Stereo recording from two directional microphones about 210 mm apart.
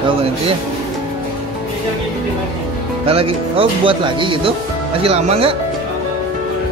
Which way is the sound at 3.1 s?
25° right (ahead or behind).